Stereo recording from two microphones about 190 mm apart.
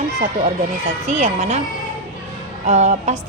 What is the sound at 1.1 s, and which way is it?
Speech, 35° right (ahead or behind).